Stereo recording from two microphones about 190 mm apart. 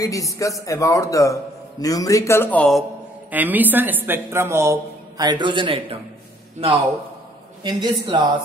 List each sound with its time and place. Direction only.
0.0 s a man's voice: 15° left (ahead or behind)
3.3 s a woman's voice: 10° right (ahead or behind); by 5.9 s 25° right (ahead or behind)
7.6 s a woman's voice: 25° right (ahead or behind)